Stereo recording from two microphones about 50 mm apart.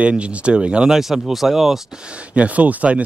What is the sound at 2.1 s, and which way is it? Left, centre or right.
Speech, right.